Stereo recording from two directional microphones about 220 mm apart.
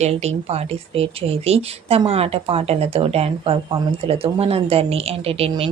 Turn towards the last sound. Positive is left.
turn(degrees=-25)  # may be behind; listen again after turning